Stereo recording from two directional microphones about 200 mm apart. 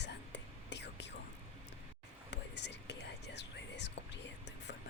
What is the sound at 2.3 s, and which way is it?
Whispering, 60° left (ahead or behind).